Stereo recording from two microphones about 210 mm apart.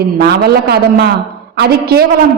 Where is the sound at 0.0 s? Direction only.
50° right (ahead or behind).